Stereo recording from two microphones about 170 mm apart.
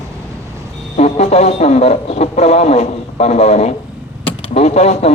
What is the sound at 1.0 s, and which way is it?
Speech, 40° left (ahead or behind).